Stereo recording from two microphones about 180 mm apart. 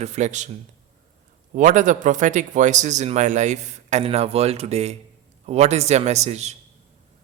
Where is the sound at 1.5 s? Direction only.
45° right (ahead or behind).